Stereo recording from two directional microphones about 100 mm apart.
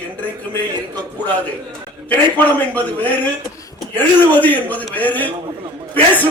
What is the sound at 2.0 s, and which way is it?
A man's voice, 15° left (ahead or behind).